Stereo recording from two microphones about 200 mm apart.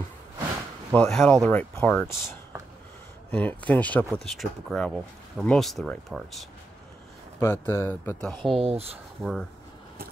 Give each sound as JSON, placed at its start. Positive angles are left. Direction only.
{"t": 0.9, "sound": "speech", "side_deg": 5}
{"t": 3.3, "sound": "speech", "side_deg": 10}
{"t": 7.3, "sound": "speech", "side_deg": 10}
{"t": 8.5, "sound": "speech", "side_deg": -30}
{"t": 9.2, "sound": "speech", "side_deg": 0}